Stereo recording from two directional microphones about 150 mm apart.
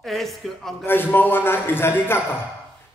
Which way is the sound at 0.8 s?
15° left (ahead or behind).